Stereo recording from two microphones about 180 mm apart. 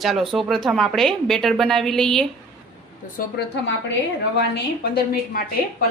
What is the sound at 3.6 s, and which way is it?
Speech, 75° left (ahead or behind).